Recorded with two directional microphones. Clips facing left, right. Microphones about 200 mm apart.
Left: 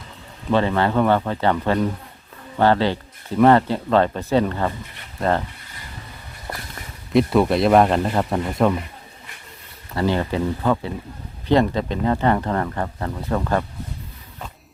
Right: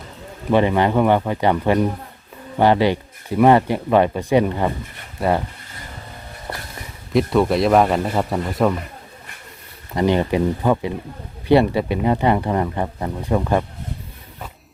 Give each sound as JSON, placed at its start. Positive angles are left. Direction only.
{"t": 0.5, "sound": "speech", "side_deg": -15}
{"t": 7.1, "sound": "a man's voice", "side_deg": 0}
{"t": 9.9, "sound": "speech", "side_deg": -15}